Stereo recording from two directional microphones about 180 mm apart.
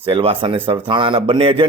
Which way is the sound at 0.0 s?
30° right (ahead or behind).